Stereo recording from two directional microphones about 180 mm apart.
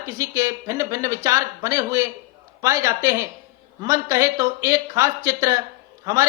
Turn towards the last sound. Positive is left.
turn(degrees=-20)  # may be behind; listen again after turning